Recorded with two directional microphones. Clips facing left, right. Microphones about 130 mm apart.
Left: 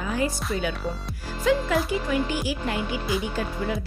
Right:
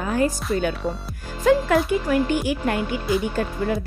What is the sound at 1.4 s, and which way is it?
Speech, 55° right (ahead or behind).